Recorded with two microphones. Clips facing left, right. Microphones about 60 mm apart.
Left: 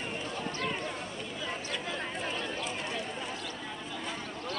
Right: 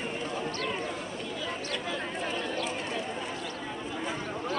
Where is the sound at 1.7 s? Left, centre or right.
Centre.